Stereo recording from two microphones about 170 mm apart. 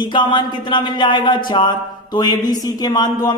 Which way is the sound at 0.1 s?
25° left (ahead or behind).